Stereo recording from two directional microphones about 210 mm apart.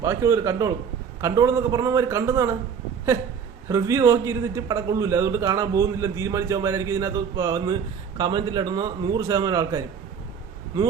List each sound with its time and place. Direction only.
0.0 s a man's voice: 15° right (ahead or behind)
3.7 s a man's voice: 15° right (ahead or behind)